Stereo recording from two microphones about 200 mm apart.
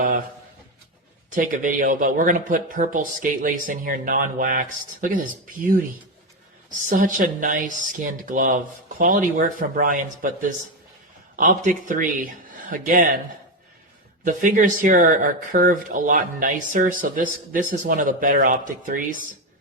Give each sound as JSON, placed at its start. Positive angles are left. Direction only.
{"t": 1.3, "sound": "speech", "side_deg": -40}
{"t": 6.9, "sound": "speech", "side_deg": -40}
{"t": 14.3, "sound": "speech", "side_deg": -40}